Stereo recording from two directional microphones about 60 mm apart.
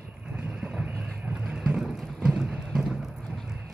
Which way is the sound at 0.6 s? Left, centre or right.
Centre.